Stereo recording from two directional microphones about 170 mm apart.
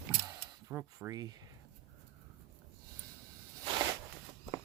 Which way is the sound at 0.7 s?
15° right (ahead or behind).